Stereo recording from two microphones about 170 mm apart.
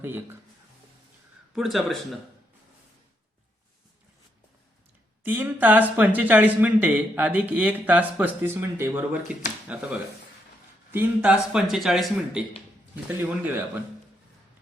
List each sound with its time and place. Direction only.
0.0 s speech: 15° right (ahead or behind)
1.5 s speech: centre (ahead or behind)
5.2 s speech: 10° right (ahead or behind)
10.9 s speech: 5° right (ahead or behind)